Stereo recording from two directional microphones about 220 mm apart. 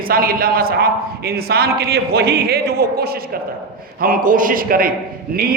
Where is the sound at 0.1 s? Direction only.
40° right (ahead or behind).